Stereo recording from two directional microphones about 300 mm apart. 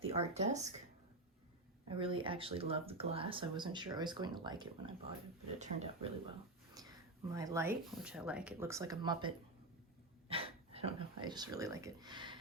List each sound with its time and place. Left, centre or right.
0.0 s speech: right
1.9 s speech: centre
6.8 s a sound: centre
7.3 s speech: centre